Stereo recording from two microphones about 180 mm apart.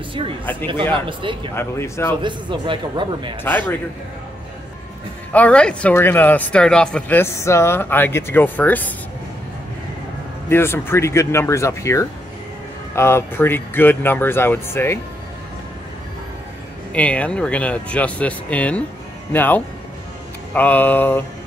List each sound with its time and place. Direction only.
1.0 s a man's voice: 25° right (ahead or behind)
1.5 s speech: 15° left (ahead or behind)
2.2 s a man's voice: 25° right (ahead or behind)
3.4 s speech: 10° left (ahead or behind)
5.3 s speech: 5° left (ahead or behind)
10.5 s speech: 15° left (ahead or behind)
16.9 s speech: 5° left (ahead or behind)